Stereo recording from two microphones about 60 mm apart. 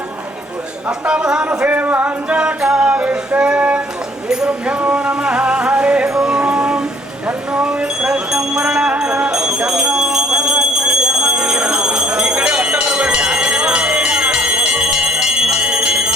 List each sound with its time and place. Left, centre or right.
0.9 s a man's voice: centre
1.6 s music: right; by 3.0 s centre
3.0 s music: right
7.3 s a sound: centre